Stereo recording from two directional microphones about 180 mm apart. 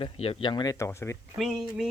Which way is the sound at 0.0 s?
30° left (ahead or behind).